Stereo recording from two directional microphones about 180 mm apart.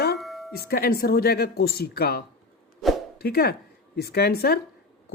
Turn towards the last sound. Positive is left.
turn(degrees=60)  # may be behind; listen again after turning